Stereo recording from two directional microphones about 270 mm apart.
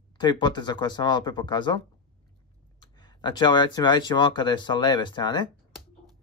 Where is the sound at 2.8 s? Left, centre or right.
Centre.